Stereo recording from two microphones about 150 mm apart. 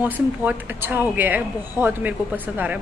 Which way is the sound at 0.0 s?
10° right (ahead or behind).